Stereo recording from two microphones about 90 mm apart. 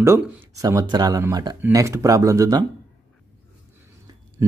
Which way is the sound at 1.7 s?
35° right (ahead or behind).